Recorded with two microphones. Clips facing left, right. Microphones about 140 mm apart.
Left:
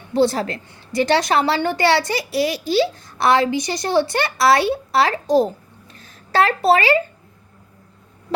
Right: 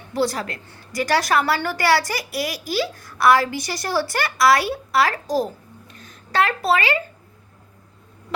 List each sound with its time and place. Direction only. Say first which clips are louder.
0.1 s a child's voice: left 5 dB; 25° left (ahead or behind)